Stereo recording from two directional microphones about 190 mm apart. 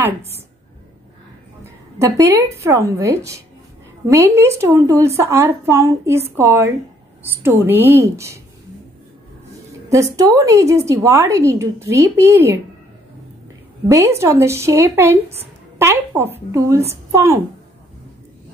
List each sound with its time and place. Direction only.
2.0 s a woman's voice: 15° right (ahead or behind)
4.4 s a woman's voice: 15° right (ahead or behind)
9.8 s a woman's voice: 15° right (ahead or behind)
13.8 s a woman's voice: 15° right (ahead or behind)